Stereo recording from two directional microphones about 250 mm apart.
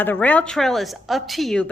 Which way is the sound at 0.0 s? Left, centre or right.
Centre.